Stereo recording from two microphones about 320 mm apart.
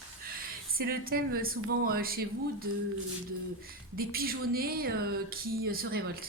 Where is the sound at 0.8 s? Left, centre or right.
Right.